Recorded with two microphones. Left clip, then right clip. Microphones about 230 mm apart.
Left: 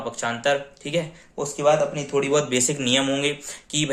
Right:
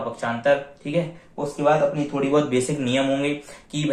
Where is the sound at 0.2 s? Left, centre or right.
Left.